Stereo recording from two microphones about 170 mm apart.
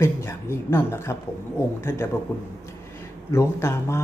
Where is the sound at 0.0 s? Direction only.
15° left (ahead or behind).